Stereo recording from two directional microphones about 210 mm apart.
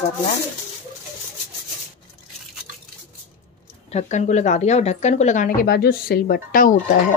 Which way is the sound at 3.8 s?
35° left (ahead or behind).